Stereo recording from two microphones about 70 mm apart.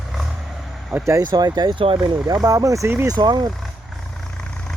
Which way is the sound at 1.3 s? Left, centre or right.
Right.